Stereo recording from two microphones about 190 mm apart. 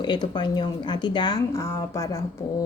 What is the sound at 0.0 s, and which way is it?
Speech, 25° left (ahead or behind).